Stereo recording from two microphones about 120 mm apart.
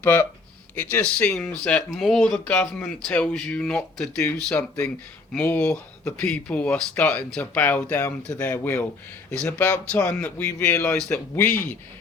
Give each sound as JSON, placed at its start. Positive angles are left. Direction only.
{"t": 0.0, "sound": "speech", "side_deg": 15}